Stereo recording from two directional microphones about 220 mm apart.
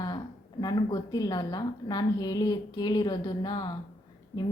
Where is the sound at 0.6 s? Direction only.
15° left (ahead or behind).